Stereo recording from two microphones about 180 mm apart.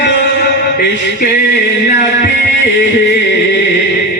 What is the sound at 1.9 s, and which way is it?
Music, 55° left (ahead or behind).